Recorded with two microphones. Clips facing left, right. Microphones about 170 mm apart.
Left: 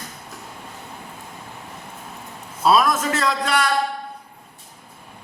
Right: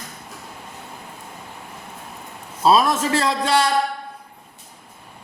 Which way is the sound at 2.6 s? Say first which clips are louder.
Right 1 dB; 30° right (ahead or behind).